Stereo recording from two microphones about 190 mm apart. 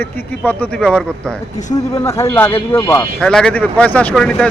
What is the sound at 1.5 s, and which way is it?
Speech, 40° left (ahead or behind).